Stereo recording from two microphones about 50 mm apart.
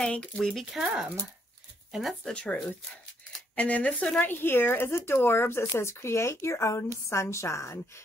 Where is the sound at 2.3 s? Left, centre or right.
Centre.